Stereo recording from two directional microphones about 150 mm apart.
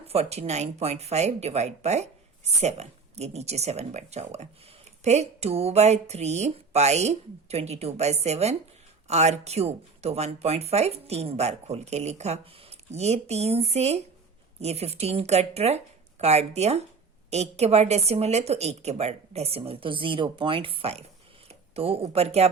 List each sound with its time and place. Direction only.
0.1 s speech: 45° right (ahead or behind)